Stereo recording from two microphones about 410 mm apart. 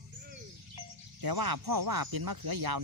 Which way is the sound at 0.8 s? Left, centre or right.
Right.